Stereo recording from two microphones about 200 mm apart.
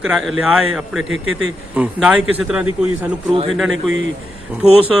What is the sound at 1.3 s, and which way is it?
Speech, 90° right.